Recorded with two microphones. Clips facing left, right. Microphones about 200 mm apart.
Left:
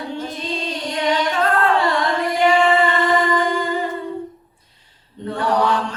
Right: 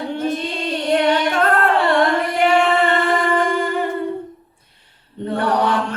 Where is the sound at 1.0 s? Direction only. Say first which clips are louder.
Right 2 dB; 60° right (ahead or behind).